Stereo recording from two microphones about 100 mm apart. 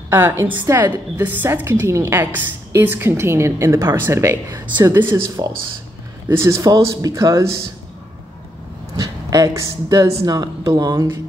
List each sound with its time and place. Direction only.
0.1 s a woman's voice: 25° right (ahead or behind)
4.9 s a woman's voice: 20° right (ahead or behind)
6.2 s speech: 25° right (ahead or behind)
8.9 s speech: 35° right (ahead or behind)